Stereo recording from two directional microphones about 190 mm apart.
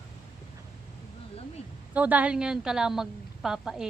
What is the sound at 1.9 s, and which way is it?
A woman's voice, 10° right (ahead or behind).